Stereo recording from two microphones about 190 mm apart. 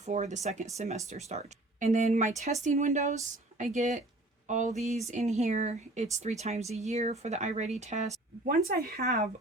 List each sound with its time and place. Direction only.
0.0 s speech: 40° right (ahead or behind)
8.5 s speech: 50° right (ahead or behind)